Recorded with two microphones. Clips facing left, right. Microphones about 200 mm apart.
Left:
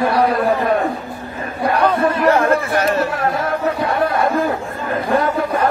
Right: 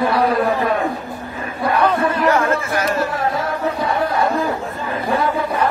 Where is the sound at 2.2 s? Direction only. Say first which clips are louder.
Left 3 dB; 35° left (ahead or behind).